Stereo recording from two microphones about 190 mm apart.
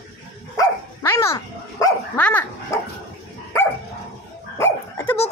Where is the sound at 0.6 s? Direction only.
15° left (ahead or behind).